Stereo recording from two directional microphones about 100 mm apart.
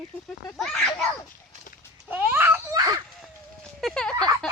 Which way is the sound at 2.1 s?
20° right (ahead or behind).